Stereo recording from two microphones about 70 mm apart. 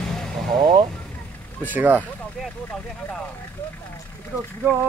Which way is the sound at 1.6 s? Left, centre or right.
Right.